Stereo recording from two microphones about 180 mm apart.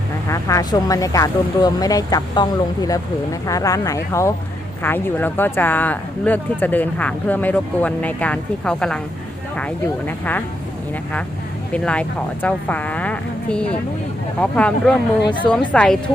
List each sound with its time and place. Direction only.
0.3 s speech: 20° left (ahead or behind)
11.7 s a woman's voice: 5° left (ahead or behind)